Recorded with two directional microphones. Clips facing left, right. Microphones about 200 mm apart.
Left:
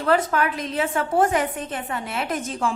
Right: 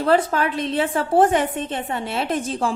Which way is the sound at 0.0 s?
30° right (ahead or behind).